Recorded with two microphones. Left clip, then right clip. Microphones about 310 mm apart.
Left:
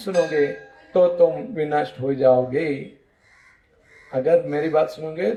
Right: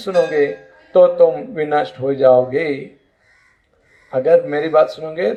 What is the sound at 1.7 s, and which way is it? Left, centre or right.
Speech, right.